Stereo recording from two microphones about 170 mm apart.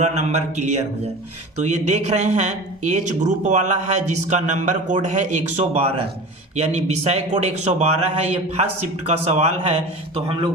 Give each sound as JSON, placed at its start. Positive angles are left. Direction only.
{"t": 0.0, "sound": "a man's voice", "side_deg": -45}